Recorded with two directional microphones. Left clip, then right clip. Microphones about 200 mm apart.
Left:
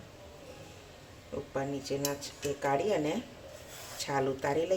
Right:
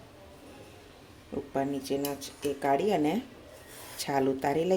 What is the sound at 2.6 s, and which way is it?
Speech, 40° right (ahead or behind).